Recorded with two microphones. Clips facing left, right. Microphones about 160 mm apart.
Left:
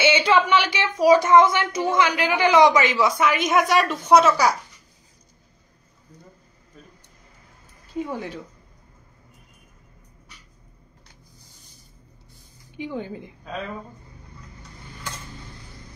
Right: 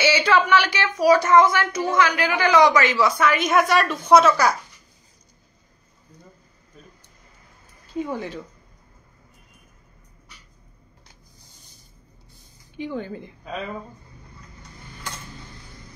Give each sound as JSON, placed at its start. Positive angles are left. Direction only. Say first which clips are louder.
{"t": 0.0, "sound": "speech", "louder": "left 1 dB", "side_deg": 20}
{"t": 8.0, "sound": "a woman's voice", "louder": "right 1 dB", "side_deg": 5}
{"t": 12.7, "sound": "speech", "louder": "right 1 dB", "side_deg": 15}